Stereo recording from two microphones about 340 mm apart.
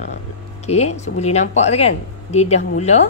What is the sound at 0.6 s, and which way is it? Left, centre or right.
Speech, centre.